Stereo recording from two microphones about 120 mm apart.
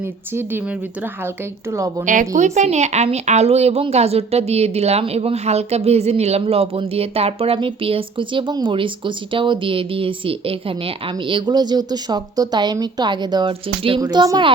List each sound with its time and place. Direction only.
1.7 s a woman's voice: 25° right (ahead or behind)
2.0 s a woman's voice: 90° right; by 14.0 s 50° right (ahead or behind)
14.0 s speech: 35° right (ahead or behind)